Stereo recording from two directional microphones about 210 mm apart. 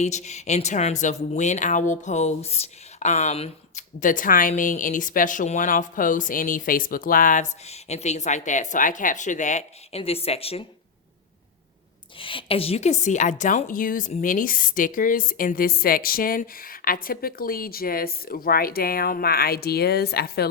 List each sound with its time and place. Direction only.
0.0 s speech: 35° left (ahead or behind)
12.2 s a woman's voice: 25° left (ahead or behind); by 20.5 s 50° left (ahead or behind)